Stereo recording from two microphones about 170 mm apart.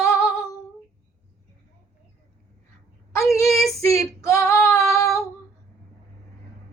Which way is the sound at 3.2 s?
Centre (ahead or behind).